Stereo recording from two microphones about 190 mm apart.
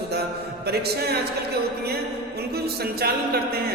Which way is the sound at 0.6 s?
55° right (ahead or behind).